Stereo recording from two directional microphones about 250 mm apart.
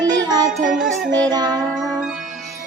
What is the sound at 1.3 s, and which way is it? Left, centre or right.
Child singing, centre.